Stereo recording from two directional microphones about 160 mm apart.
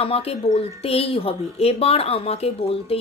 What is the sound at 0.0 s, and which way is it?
Speech, 40° left (ahead or behind).